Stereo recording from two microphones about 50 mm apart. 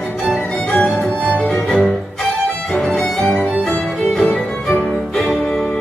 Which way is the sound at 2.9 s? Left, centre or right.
Centre.